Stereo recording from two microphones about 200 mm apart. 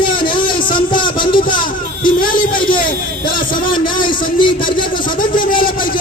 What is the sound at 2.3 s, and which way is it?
A man's voice, 25° left (ahead or behind).